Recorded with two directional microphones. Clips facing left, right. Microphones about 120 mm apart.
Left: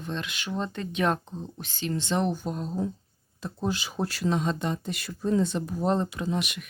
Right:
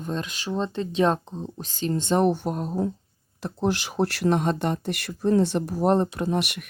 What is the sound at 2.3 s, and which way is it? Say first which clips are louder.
Speech: right 4 dB; 60° right (ahead or behind).